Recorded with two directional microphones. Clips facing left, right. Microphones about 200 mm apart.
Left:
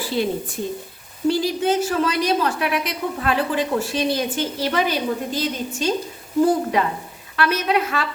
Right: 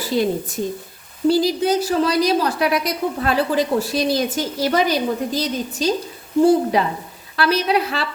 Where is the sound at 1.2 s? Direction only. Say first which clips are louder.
Right 3 dB; 40° right (ahead or behind).